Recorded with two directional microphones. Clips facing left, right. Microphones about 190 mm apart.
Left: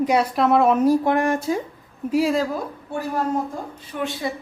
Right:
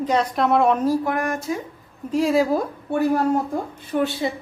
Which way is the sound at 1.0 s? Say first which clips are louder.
Left 4 dB; 25° left (ahead or behind).